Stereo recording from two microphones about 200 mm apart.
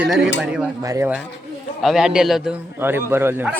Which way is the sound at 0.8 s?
15° right (ahead or behind).